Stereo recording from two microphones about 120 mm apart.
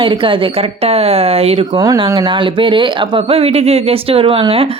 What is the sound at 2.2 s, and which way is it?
Speech, 45° right (ahead or behind).